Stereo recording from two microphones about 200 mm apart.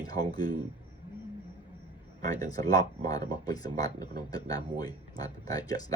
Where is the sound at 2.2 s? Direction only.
20° left (ahead or behind).